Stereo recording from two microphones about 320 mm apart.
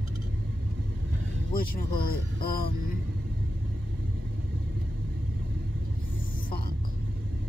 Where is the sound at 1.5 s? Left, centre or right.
Left.